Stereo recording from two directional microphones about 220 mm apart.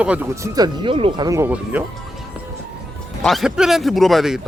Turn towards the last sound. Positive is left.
turn(degrees=0)  # may be behind; listen again after turning